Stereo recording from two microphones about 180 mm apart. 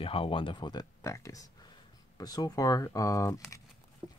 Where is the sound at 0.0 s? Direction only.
30° left (ahead or behind).